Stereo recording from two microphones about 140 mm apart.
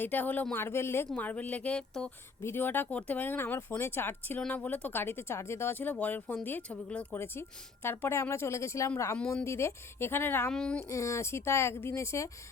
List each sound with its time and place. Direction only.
0.0 s speech: 10° left (ahead or behind)
10.8 s speech: 20° left (ahead or behind)